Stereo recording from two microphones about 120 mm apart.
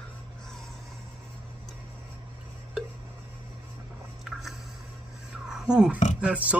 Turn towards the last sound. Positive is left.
turn(degrees=-10)  # may be behind; listen again after turning